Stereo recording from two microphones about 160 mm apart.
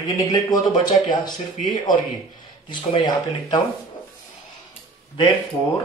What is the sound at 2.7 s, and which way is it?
Speech, 30° left (ahead or behind).